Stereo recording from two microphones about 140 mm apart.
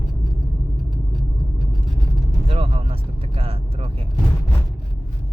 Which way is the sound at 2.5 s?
45° right (ahead or behind).